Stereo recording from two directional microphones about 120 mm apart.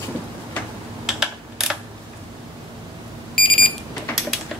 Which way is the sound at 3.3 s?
Centre (ahead or behind).